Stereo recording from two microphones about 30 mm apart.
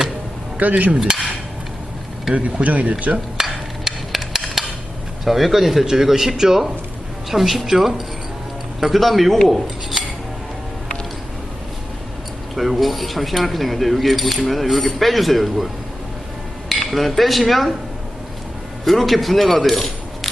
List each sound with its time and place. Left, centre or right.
0.5 s cutlery: right
1.0 s cutlery: right
2.3 s speech: right
3.4 s a sound: right
5.2 s speech: centre
8.8 s speech: centre
12.5 s speech: centre
16.6 s cutlery: centre
18.9 s speech: centre